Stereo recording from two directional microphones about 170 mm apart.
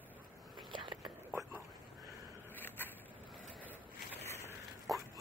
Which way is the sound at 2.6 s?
10° left (ahead or behind).